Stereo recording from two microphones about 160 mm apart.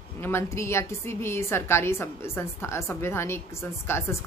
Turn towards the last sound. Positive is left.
turn(degrees=15)  # may be behind; listen again after turning